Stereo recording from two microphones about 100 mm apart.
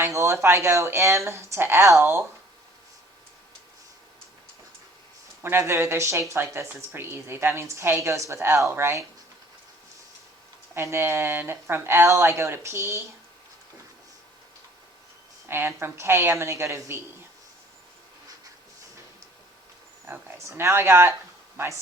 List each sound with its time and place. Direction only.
0.0 s speech: 25° right (ahead or behind)
5.4 s speech: 25° right (ahead or behind)
10.8 s speech: 25° right (ahead or behind)
15.4 s speech: 25° right (ahead or behind)
20.1 s speech: 25° right (ahead or behind)